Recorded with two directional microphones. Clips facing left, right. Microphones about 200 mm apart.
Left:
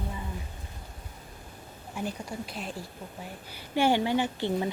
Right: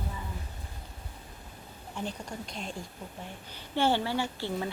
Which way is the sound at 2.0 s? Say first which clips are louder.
Left 3 dB; 10° left (ahead or behind).